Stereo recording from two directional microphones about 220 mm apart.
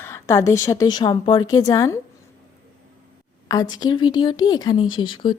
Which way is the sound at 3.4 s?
15° left (ahead or behind).